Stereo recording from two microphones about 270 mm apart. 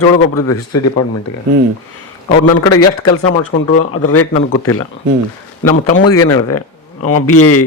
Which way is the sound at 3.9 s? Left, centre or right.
Left.